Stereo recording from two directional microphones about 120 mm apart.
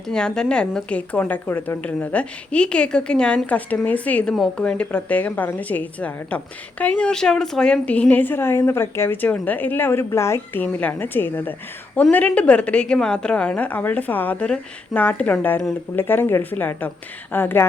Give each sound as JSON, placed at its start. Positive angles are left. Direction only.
{"t": 0.1, "sound": "a woman's voice", "side_deg": 5}